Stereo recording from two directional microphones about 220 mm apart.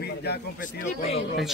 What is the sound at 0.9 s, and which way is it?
Speech, 35° left (ahead or behind).